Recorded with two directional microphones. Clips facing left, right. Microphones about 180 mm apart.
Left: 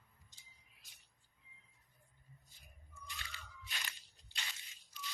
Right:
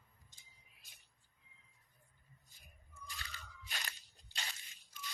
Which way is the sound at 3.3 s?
40° right (ahead or behind).